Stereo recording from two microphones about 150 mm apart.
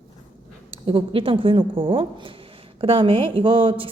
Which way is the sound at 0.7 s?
35° right (ahead or behind).